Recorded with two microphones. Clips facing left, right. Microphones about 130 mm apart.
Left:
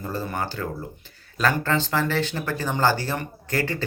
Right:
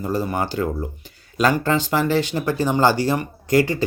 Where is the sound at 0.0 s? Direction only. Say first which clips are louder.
Right 6 dB; 15° right (ahead or behind).